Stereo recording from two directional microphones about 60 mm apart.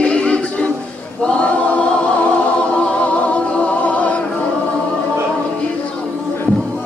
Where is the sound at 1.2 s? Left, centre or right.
Centre.